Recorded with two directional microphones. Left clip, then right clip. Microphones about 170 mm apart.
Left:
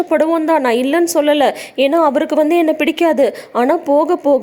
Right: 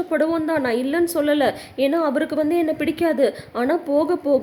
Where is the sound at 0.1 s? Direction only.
30° left (ahead or behind).